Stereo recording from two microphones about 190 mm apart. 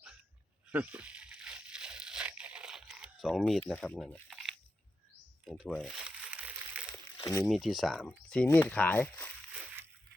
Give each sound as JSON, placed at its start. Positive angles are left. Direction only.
{"t": 0.7, "sound": "a sound", "side_deg": -10}
{"t": 5.5, "sound": "crumpling", "side_deg": 0}
{"t": 7.2, "sound": "speech", "side_deg": 15}
{"t": 7.4, "sound": "speech", "side_deg": 0}
{"t": 9.5, "sound": "crushing", "side_deg": -10}